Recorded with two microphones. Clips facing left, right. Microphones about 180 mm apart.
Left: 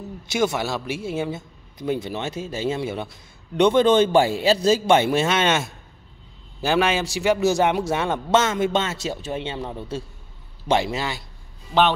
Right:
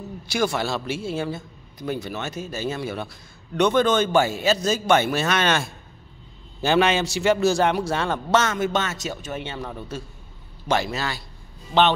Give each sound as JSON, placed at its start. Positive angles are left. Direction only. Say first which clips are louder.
{"t": 0.3, "sound": "a man's voice", "louder": "left 1 dB", "side_deg": 20}
{"t": 6.6, "sound": "a man's voice", "louder": "right 1 dB", "side_deg": 10}